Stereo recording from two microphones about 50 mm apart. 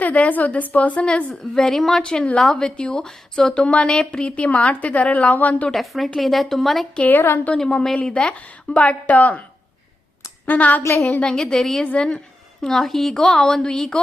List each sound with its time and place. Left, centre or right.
0.0 s a woman's voice: left
1.3 s a woman's voice: centre
2.0 s a woman's voice: centre
5.7 s a woman's voice: centre
7.2 s a woman's voice: left
7.5 s a woman's voice: centre
10.4 s a woman's voice: left
11.2 s a woman's voice: centre
12.6 s a woman's voice: centre